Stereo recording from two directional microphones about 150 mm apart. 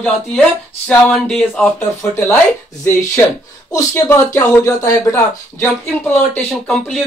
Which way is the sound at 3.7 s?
20° left (ahead or behind).